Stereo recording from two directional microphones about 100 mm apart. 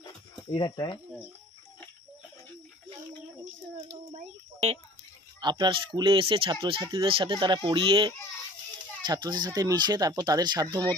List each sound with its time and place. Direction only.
0.6 s speech: 50° left (ahead or behind)
5.4 s speech: 45° right (ahead or behind)